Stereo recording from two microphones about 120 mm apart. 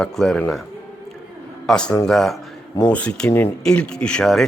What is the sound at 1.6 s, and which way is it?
Speech, 5° left (ahead or behind).